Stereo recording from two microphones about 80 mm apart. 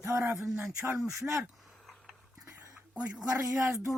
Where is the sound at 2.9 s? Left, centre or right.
Centre.